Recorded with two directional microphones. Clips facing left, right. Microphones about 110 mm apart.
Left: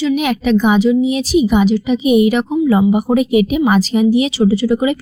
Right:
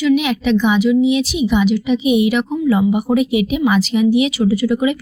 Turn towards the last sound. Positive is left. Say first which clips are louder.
# left 2 dB
turn(degrees=35)  # may be behind; listen again after turning